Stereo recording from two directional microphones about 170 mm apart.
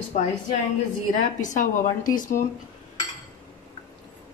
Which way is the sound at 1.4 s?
50° left (ahead or behind).